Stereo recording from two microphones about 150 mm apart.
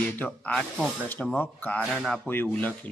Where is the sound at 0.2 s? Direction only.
10° left (ahead or behind).